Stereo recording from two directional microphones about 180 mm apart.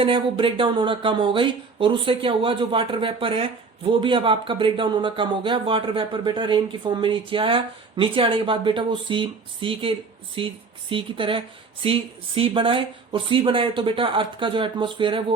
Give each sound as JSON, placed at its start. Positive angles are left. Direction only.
{"t": 0.0, "sound": "speech", "side_deg": -30}